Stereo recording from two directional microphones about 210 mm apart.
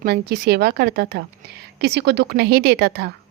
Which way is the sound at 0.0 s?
50° right (ahead or behind).